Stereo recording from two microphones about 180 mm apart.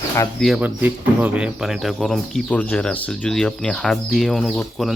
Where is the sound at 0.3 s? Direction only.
Centre (ahead or behind).